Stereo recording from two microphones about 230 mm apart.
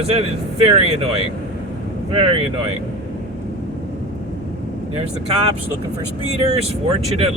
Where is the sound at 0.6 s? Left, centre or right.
Right.